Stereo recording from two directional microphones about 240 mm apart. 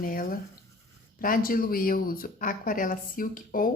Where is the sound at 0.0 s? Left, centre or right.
Left.